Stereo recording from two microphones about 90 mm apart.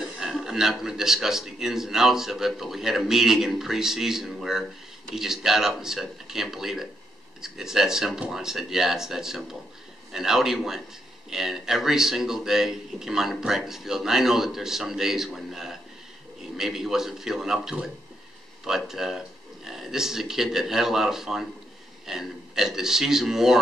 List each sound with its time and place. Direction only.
0.2 s speech: 5° right (ahead or behind)